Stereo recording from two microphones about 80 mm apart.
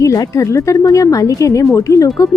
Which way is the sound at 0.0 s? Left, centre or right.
Left.